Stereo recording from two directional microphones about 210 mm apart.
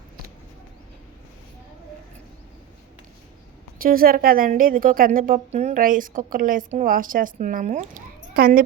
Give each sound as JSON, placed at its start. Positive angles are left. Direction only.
{"t": 3.8, "sound": "a woman's voice", "side_deg": -45}